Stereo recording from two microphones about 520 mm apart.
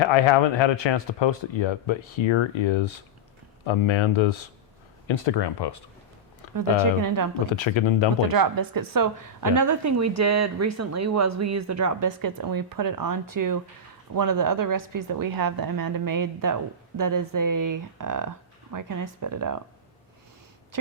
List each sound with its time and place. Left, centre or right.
0.0 s speech: left
6.5 s a woman's voice: right
7.5 s speech: left
8.2 s a woman's voice: right